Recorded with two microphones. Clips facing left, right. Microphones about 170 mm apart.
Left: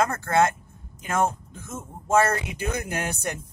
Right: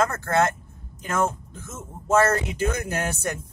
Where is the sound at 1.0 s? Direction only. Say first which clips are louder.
Even; 15° left (ahead or behind).